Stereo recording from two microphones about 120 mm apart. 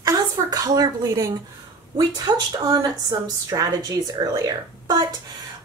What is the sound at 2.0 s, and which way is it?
A woman's voice, 35° right (ahead or behind).